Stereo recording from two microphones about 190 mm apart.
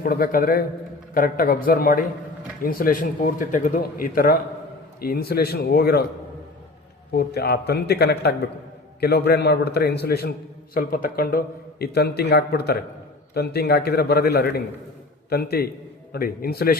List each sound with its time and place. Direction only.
0.0 s a man's voice: 50° left (ahead or behind)
7.1 s a man's voice: 55° left (ahead or behind)